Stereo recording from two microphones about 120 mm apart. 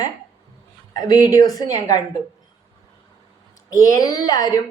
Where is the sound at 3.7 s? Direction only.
25° left (ahead or behind).